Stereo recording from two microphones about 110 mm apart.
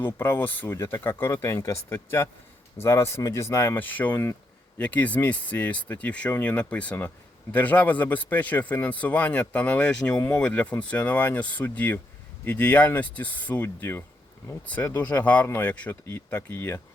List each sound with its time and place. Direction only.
0.0 s a man's voice: 20° left (ahead or behind)